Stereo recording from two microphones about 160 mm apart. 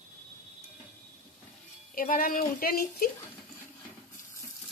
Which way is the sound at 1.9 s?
60° left (ahead or behind).